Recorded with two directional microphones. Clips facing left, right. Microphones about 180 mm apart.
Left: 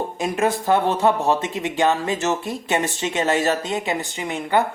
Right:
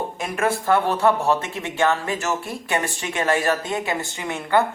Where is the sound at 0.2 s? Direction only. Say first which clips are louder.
Left 3 dB; 20° left (ahead or behind).